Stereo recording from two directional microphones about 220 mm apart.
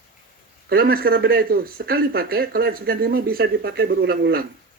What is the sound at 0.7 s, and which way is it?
Speech, 45° right (ahead or behind).